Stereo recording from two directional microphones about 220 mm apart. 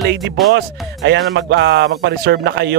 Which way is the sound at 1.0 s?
55° right (ahead or behind).